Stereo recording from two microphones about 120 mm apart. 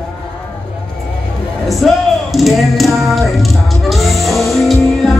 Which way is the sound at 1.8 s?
Centre (ahead or behind).